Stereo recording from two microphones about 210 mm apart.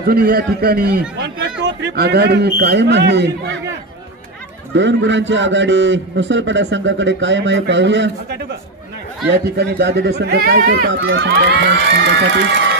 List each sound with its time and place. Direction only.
0.1 s a man's voice: 45° right (ahead or behind)
4.7 s a man's voice: 60° right (ahead or behind)
9.4 s speech: 50° right (ahead or behind)